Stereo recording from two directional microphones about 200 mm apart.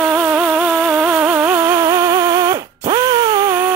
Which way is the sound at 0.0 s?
10° right (ahead or behind).